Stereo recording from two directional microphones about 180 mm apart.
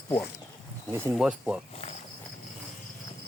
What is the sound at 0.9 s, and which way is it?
Speech, 15° right (ahead or behind).